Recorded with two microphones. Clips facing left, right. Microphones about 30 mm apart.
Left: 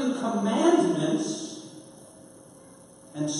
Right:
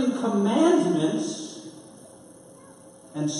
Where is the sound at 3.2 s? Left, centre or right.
Centre.